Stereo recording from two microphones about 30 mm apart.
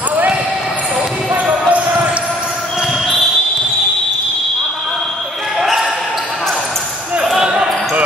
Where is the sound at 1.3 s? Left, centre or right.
Right.